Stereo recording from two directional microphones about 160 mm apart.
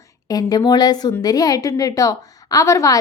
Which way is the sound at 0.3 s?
25° left (ahead or behind).